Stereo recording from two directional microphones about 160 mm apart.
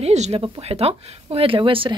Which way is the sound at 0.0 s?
45° right (ahead or behind).